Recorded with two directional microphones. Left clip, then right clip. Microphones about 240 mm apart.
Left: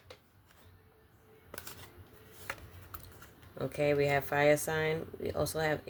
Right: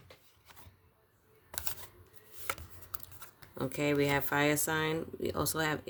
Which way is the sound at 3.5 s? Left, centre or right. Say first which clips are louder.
Left 1 dB; right.